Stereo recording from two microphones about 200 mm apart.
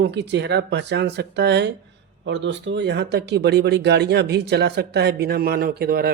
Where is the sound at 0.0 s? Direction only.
60° right (ahead or behind).